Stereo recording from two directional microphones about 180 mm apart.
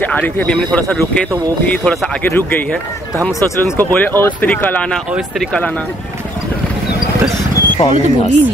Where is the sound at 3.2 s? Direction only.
Centre (ahead or behind).